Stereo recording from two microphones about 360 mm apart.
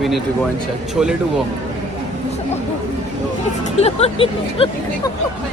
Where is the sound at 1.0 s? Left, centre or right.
Centre.